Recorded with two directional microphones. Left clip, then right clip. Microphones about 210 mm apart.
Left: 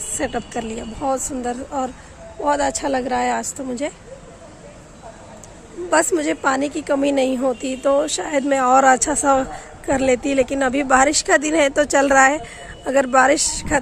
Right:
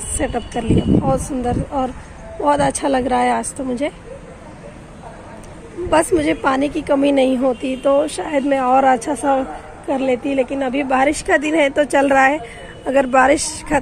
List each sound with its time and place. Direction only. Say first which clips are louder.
0.2 s a woman's voice: right 3 dB; 10° left (ahead or behind)
5.9 s a woman's voice: right 2 dB; 10° left (ahead or behind)